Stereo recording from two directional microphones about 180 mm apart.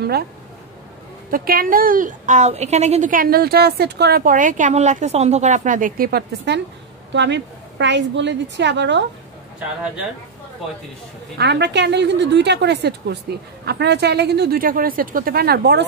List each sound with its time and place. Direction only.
1.3 s a woman's voice: 55° right (ahead or behind)
7.1 s a woman's voice: 80° right
11.3 s a woman's voice: 70° right (ahead or behind)